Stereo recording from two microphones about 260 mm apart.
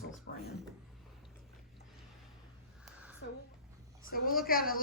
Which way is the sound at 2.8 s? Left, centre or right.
Centre.